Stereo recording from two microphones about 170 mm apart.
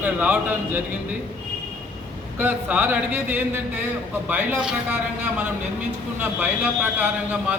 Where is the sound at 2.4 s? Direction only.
10° right (ahead or behind).